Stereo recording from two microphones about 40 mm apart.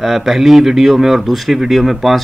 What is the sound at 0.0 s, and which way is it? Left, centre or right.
A man's voice, centre.